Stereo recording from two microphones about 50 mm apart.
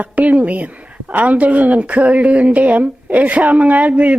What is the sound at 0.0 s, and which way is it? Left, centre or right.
A woman's voice, right.